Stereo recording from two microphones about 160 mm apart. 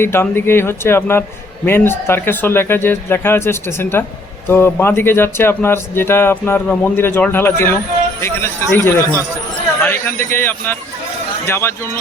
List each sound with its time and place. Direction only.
0.0 s speech: 15° left (ahead or behind)